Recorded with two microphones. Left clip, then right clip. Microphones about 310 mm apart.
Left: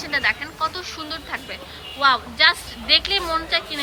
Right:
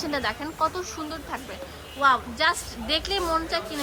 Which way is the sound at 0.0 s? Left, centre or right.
Centre.